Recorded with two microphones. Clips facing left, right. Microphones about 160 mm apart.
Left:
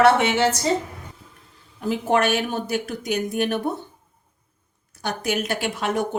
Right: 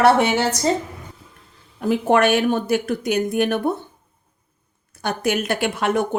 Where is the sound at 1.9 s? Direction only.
60° right (ahead or behind).